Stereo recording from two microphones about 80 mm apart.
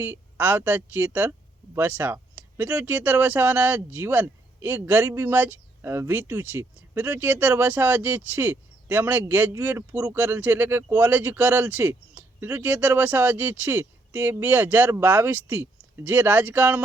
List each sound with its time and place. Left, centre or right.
0.0 s speech: right